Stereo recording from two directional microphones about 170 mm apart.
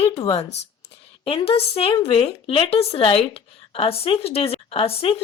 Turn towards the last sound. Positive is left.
turn(degrees=35)  # may be behind; listen again after turning